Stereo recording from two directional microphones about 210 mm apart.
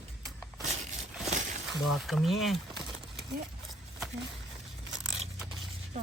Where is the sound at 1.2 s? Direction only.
35° right (ahead or behind).